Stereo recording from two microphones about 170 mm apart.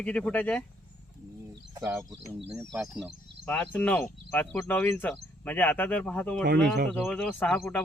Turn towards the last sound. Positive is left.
turn(degrees=5)  # may be behind; listen again after turning